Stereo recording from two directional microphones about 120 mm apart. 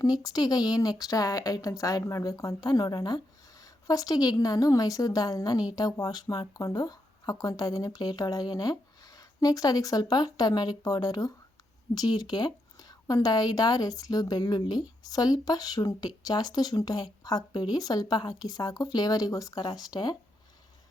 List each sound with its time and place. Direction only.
0.0 s a woman's voice: 30° left (ahead or behind)